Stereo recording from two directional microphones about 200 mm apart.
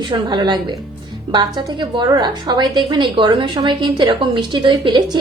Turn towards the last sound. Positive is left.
turn(degrees=-20)  # may be behind; listen again after turning